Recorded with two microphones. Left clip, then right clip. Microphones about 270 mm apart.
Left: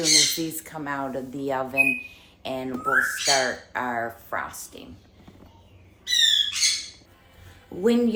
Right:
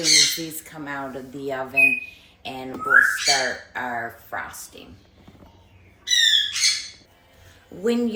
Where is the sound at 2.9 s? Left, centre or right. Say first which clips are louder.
Right 5 dB; centre.